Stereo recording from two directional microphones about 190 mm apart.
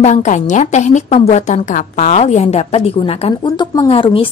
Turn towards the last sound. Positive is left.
turn(degrees=25)  # may be behind; listen again after turning